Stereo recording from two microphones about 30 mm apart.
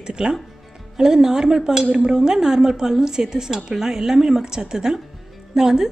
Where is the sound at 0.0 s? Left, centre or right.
Right.